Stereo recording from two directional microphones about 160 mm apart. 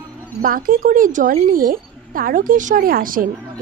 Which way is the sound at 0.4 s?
60° right (ahead or behind).